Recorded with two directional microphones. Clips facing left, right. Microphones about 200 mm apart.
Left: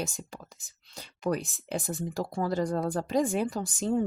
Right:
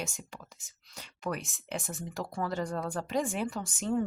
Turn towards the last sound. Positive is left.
turn(degrees=35)  # may be behind; listen again after turning